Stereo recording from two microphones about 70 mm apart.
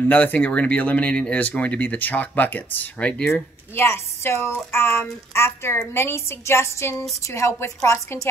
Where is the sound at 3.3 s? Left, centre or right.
Left.